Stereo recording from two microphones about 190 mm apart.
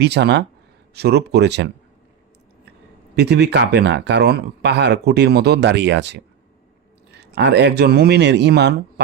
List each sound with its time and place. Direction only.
0.0 s speech: 60° right (ahead or behind)
3.2 s speech: 60° right (ahead or behind)